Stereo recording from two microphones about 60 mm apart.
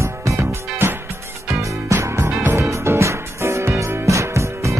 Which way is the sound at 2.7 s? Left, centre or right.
Right.